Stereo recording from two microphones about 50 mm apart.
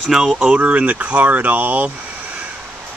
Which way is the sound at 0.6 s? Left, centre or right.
Right.